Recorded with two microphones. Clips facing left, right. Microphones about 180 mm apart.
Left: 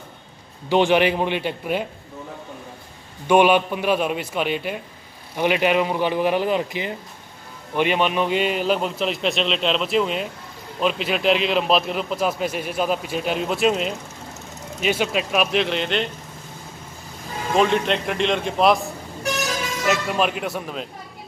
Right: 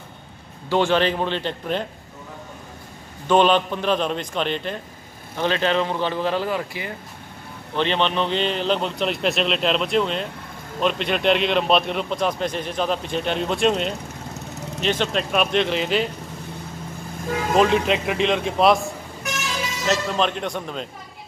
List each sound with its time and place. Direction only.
0.7 s a man's voice: 15° left (ahead or behind)
3.3 s a man's voice: 10° left (ahead or behind)
17.6 s a man's voice: centre (ahead or behind)
19.2 s vehicle: 40° left (ahead or behind)
19.9 s a man's voice: 10° left (ahead or behind)